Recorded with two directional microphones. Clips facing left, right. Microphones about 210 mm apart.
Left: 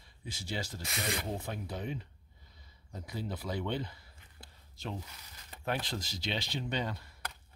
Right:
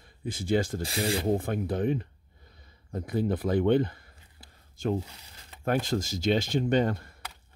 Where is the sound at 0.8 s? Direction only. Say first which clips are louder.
Right 9 dB; 30° right (ahead or behind).